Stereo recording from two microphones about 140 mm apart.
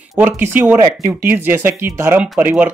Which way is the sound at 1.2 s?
15° right (ahead or behind).